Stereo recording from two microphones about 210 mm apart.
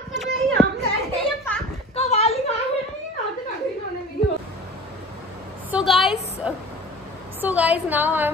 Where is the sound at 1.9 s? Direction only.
30° left (ahead or behind).